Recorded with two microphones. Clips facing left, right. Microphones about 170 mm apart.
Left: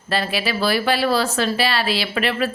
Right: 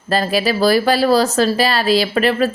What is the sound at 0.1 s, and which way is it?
Speech, 40° right (ahead or behind).